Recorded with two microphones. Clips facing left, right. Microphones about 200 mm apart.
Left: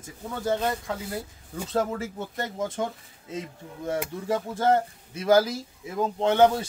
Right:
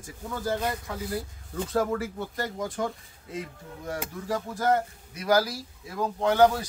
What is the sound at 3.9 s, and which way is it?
A man's voice, 25° left (ahead or behind).